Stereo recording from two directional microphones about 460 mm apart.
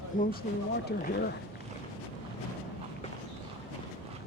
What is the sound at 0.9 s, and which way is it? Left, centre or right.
Speech, left.